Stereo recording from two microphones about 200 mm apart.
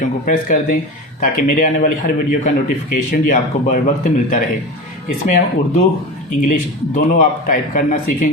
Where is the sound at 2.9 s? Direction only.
45° left (ahead or behind).